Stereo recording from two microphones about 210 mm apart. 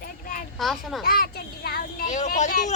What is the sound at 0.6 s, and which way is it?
Speech, centre (ahead or behind).